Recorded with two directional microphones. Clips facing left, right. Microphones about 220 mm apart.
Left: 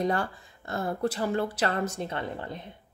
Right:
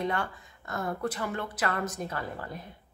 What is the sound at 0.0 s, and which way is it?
Speech, 35° left (ahead or behind).